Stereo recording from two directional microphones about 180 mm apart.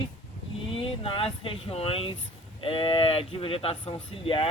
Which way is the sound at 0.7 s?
30° left (ahead or behind).